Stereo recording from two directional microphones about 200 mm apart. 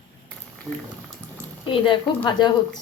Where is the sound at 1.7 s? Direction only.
25° left (ahead or behind).